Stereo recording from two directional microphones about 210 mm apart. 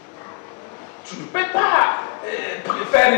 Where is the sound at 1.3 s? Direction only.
15° left (ahead or behind).